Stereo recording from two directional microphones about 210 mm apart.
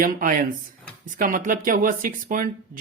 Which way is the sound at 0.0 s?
40° right (ahead or behind).